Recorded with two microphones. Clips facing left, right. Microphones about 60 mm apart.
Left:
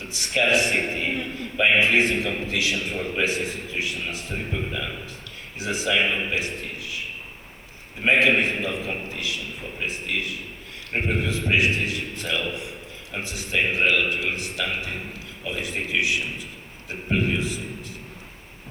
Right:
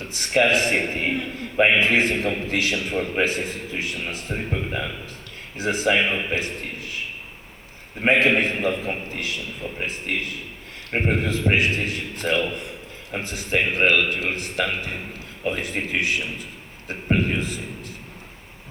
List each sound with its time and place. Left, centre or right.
0.0 s a man's voice: right
8.0 s a man's voice: right